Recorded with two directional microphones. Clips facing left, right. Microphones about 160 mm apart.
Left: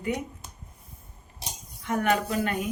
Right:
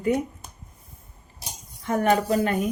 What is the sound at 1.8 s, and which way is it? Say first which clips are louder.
Speech: right 4 dB; 35° right (ahead or behind).